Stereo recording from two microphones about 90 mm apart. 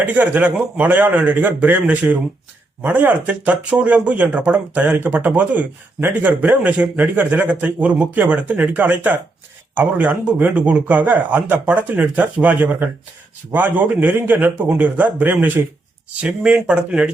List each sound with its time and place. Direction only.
0.0 s a man's voice: 20° right (ahead or behind)